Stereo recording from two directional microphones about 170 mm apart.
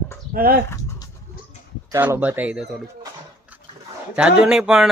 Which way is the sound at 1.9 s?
15° right (ahead or behind).